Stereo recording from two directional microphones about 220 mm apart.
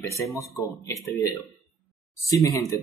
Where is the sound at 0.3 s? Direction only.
15° left (ahead or behind).